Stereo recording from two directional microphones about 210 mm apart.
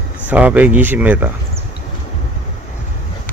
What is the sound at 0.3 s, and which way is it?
Speech, 5° right (ahead or behind).